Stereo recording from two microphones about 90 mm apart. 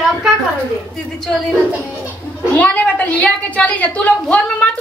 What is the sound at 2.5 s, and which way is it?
A woman's voice, 15° left (ahead or behind).